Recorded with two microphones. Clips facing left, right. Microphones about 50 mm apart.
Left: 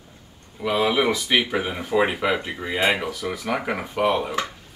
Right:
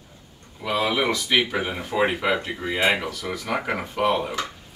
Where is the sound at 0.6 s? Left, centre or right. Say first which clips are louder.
Left 2 dB; centre.